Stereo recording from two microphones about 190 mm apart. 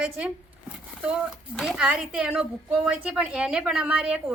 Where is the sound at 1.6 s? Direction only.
5° right (ahead or behind).